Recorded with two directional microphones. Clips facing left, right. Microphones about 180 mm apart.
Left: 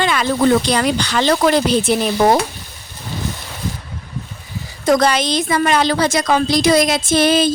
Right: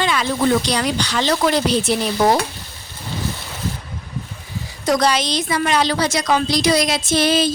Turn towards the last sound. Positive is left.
turn(degrees=55)  # may be behind; listen again after turning